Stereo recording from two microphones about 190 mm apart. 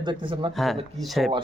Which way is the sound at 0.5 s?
Centre (ahead or behind).